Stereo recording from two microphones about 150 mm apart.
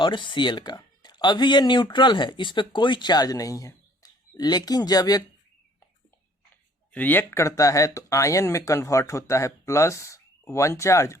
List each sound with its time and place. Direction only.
0.0 s speech: 30° left (ahead or behind)
6.9 s speech: 10° left (ahead or behind)